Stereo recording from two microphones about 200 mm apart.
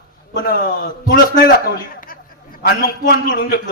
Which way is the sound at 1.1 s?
45° left (ahead or behind).